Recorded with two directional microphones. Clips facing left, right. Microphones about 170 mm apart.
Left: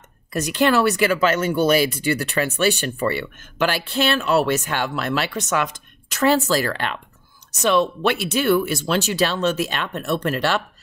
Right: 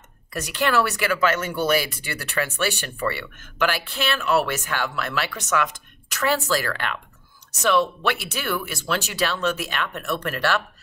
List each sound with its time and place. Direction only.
0.3 s speech: 25° left (ahead or behind)